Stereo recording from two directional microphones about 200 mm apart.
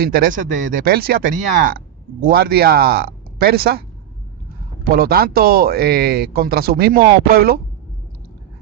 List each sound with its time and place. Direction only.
0.0 s speech: 45° right (ahead or behind)
4.9 s speech: 50° right (ahead or behind)